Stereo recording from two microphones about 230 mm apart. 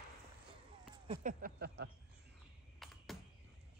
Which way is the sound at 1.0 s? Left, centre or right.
Right.